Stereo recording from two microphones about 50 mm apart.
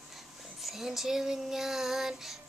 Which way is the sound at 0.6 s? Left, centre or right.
Centre.